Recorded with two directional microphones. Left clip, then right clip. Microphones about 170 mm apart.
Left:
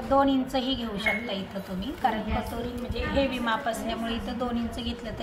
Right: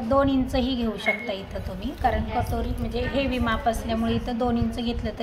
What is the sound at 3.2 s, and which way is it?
A woman's voice, 65° right (ahead or behind).